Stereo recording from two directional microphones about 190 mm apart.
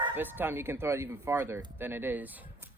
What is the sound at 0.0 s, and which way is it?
Speech, 10° right (ahead or behind).